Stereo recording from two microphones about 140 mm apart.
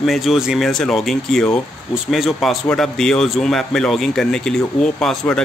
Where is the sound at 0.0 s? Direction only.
Centre (ahead or behind).